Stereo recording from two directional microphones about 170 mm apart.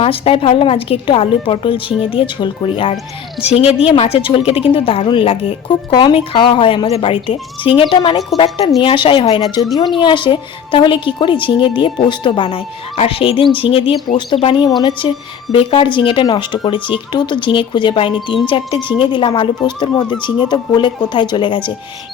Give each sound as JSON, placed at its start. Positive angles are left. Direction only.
{"t": 0.0, "sound": "a woman's voice", "side_deg": 35}